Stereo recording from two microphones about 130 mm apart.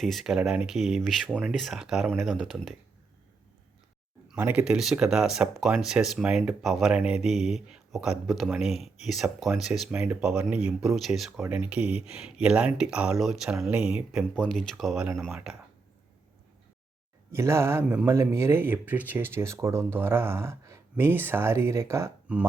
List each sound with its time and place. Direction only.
0.0 s speech: centre (ahead or behind)
4.3 s speech: 10° right (ahead or behind)
17.3 s speech: 20° right (ahead or behind)